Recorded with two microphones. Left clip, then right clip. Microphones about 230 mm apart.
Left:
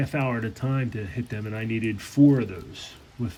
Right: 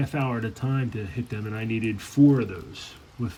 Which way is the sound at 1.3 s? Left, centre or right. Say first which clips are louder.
Even; left.